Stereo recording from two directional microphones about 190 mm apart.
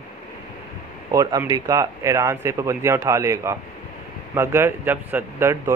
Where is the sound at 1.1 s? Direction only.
20° right (ahead or behind).